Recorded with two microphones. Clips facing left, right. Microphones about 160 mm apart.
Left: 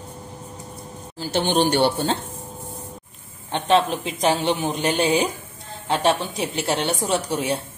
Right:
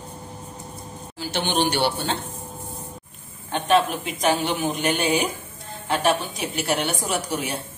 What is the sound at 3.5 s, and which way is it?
A woman's voice, 25° left (ahead or behind).